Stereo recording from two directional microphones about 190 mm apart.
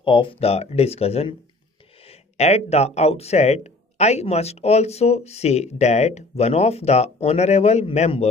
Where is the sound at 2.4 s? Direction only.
35° left (ahead or behind).